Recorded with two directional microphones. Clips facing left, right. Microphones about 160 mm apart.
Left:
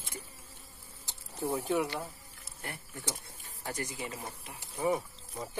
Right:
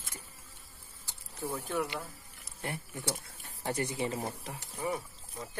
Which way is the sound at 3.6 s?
30° right (ahead or behind).